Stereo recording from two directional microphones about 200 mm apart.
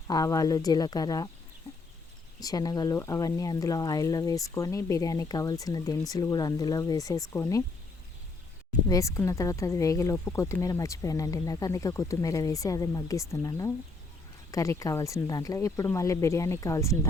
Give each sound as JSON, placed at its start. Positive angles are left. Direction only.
{"t": 0.1, "sound": "speech", "side_deg": 15}
{"t": 2.4, "sound": "speech", "side_deg": 20}
{"t": 8.9, "sound": "speech", "side_deg": 15}